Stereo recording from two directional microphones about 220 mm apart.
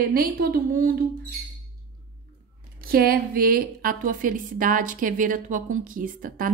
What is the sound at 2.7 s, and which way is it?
Speech, 45° right (ahead or behind).